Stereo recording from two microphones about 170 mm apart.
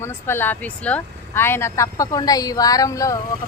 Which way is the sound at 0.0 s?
15° left (ahead or behind).